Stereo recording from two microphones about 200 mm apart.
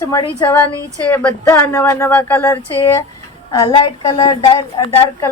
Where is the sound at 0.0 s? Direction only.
15° left (ahead or behind).